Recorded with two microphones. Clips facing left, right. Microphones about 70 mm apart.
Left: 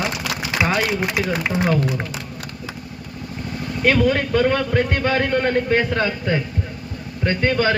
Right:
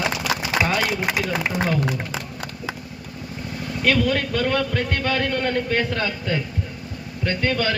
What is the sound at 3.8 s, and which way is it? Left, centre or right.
A man's voice, left.